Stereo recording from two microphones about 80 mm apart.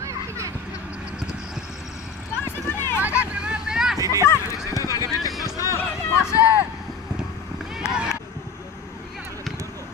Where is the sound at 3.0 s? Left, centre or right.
Centre.